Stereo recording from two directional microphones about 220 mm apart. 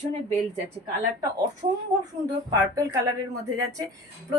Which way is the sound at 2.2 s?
15° right (ahead or behind).